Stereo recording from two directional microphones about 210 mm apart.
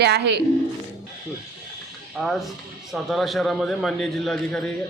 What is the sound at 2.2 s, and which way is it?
A man's voice, centre (ahead or behind).